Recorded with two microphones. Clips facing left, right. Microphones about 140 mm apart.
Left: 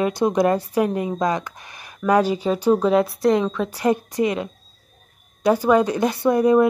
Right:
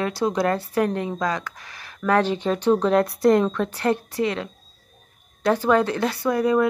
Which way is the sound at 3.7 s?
10° left (ahead or behind).